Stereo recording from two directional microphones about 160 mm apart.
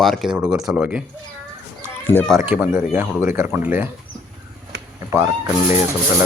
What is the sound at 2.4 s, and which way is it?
Speech, 15° right (ahead or behind).